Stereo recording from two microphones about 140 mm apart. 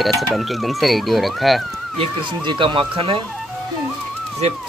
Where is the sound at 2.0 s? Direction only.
35° right (ahead or behind).